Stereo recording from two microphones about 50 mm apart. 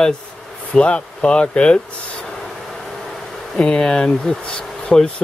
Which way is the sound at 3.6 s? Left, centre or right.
Centre.